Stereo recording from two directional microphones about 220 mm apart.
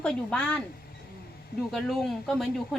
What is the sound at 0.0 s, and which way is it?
Speech, 5° left (ahead or behind).